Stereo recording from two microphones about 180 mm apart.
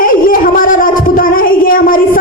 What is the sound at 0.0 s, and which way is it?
Child singing, 50° left (ahead or behind).